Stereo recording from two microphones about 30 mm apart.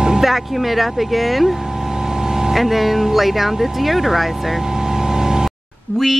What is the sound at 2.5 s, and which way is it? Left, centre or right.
Speech, centre.